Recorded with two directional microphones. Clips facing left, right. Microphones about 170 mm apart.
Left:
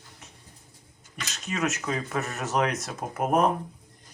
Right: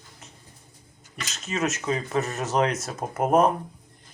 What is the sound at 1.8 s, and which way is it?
Speech, 20° right (ahead or behind).